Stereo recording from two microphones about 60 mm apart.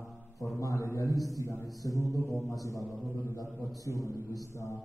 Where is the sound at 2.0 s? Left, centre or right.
Left.